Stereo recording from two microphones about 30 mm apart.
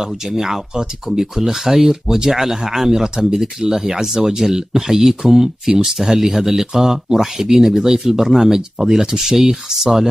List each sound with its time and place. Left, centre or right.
0.1 s speech: centre